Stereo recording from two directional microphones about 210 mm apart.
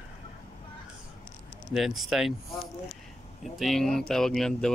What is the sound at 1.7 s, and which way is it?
Speech, centre (ahead or behind).